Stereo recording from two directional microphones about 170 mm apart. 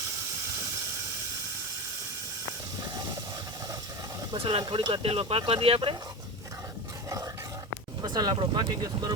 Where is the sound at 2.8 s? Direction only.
20° right (ahead or behind).